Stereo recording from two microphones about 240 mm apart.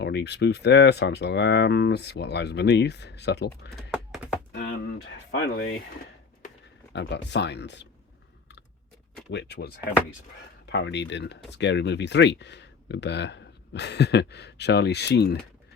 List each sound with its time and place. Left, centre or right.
0.0 s speech: left
3.9 s typing: centre
5.3 s speech: left
6.9 s speech: left
9.3 s speech: left